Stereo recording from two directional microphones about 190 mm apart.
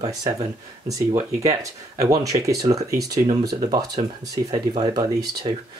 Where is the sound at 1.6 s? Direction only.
20° right (ahead or behind).